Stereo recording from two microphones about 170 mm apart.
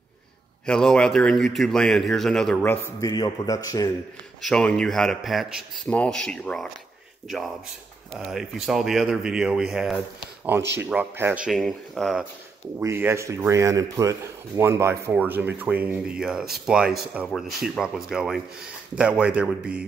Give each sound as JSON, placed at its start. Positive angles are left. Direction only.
{"t": 0.7, "sound": "speech", "side_deg": 5}
{"t": 4.4, "sound": "speech", "side_deg": 5}
{"t": 8.1, "sound": "speech", "side_deg": 0}
{"t": 12.7, "sound": "speech", "side_deg": -15}